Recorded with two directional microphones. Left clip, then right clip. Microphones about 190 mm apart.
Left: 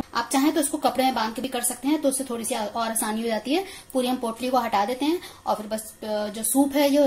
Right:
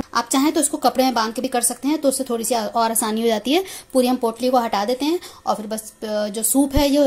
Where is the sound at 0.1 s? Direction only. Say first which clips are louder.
Right 4 dB; 45° right (ahead or behind).